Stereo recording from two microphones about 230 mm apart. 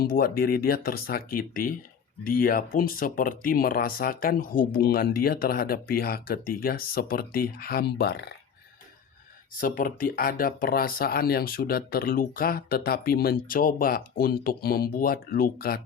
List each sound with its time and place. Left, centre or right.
0.0 s speech: left
9.6 s speech: left